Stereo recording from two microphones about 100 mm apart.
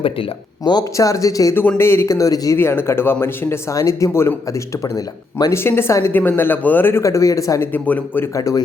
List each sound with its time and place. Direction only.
0.6 s speech: 45° left (ahead or behind)
0.9 s speech: 35° left (ahead or behind)
2.6 s speech: 25° left (ahead or behind)
5.5 s speech: 25° left (ahead or behind)
7.0 s speech: 30° left (ahead or behind)
7.7 s speech: 15° left (ahead or behind)
8.3 s speech: 35° left (ahead or behind)